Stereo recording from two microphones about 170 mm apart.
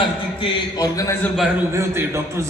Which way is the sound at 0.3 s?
30° left (ahead or behind).